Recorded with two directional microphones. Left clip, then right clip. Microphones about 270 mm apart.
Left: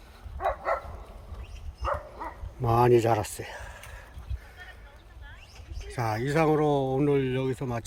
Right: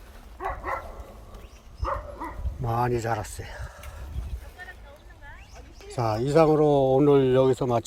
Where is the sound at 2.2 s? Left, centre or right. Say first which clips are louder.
Even; left.